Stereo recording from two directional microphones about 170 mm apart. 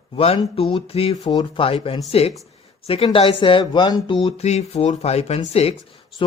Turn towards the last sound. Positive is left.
turn(degrees=35)  # may be behind; listen again after turning